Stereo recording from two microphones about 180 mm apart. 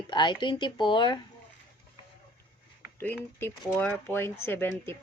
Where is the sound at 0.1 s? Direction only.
25° left (ahead or behind).